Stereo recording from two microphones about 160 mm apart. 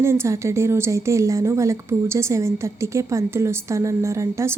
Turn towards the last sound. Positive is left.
turn(degrees=-20)  # may be behind; listen again after turning